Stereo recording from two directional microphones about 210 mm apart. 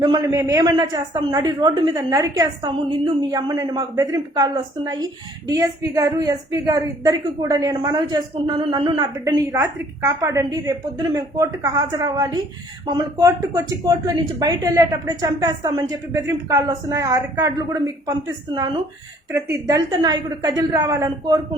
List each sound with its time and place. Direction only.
0.0 s a woman's voice: 15° right (ahead or behind)
19.3 s a woman's voice: 15° right (ahead or behind)